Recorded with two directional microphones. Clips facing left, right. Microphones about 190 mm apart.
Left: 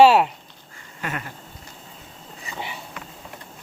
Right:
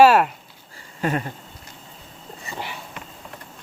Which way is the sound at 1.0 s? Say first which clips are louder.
Right 7 dB; 35° right (ahead or behind).